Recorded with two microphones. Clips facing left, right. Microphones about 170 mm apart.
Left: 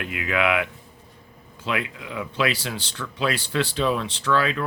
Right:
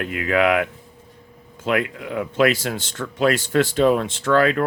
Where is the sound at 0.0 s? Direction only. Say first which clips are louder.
Right 5 dB; 40° right (ahead or behind).